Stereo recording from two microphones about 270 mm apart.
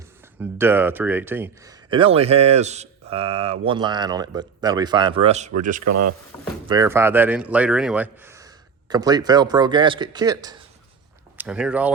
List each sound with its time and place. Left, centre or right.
0.6 s speech: centre
1.9 s speech: right
5.8 s speech: right
6.7 s speech: centre
11.3 s speech: centre